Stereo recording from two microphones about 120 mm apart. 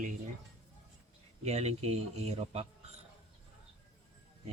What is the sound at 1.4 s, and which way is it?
A man's voice, 65° right (ahead or behind).